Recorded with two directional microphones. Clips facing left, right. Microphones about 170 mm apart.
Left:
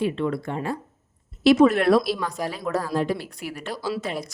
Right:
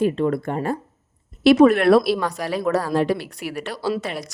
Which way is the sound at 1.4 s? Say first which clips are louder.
Right 3 dB; 60° right (ahead or behind).